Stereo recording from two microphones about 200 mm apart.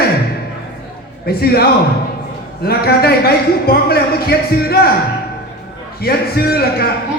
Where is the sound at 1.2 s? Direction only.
50° left (ahead or behind).